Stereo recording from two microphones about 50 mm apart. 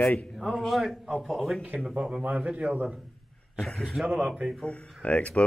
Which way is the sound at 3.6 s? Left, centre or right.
Centre.